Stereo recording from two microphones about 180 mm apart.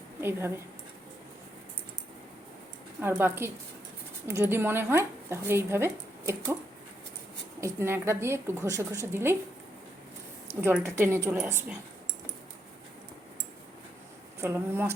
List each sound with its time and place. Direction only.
0.2 s speech: 15° right (ahead or behind)
3.0 s speech: 10° right (ahead or behind)
7.6 s speech: 15° right (ahead or behind)
10.6 s speech: 10° right (ahead or behind)
14.4 s speech: 10° right (ahead or behind)